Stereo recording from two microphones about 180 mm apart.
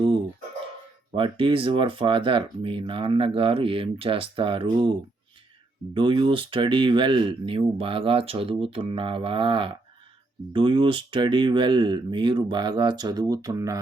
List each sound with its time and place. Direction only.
1.1 s speech: 30° right (ahead or behind)